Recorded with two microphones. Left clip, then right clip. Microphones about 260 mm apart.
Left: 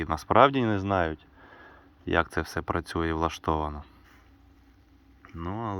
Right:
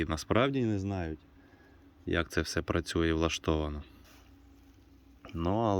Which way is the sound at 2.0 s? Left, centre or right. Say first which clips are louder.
Left 5 dB; centre.